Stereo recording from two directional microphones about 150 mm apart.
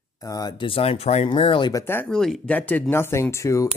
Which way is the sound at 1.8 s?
10° left (ahead or behind).